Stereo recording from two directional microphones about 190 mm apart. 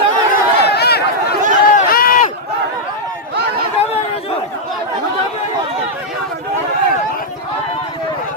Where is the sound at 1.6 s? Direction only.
50° left (ahead or behind).